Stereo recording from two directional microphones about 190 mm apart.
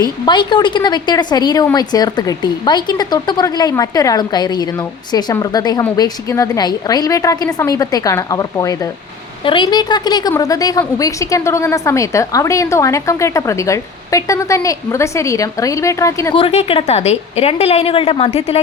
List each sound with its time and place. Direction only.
0.3 s a woman's voice: 25° left (ahead or behind)
16.3 s a woman's voice: 30° left (ahead or behind)